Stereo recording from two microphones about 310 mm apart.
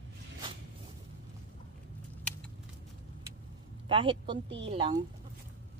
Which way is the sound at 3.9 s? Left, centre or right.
Centre.